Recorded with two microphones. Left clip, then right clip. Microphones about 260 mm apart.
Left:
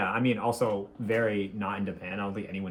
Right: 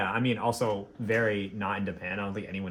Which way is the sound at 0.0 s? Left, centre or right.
Right.